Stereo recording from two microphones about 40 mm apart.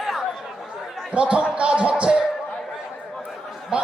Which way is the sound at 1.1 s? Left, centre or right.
Right.